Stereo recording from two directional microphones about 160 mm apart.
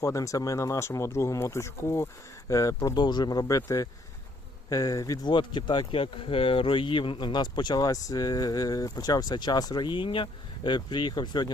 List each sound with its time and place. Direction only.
0.0 s speech: 20° left (ahead or behind)